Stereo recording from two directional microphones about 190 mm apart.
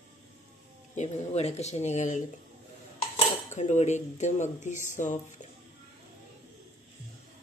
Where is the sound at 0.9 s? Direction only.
35° left (ahead or behind).